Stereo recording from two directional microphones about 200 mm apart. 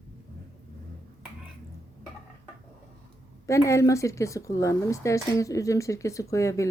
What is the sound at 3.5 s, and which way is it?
Speech, 15° left (ahead or behind).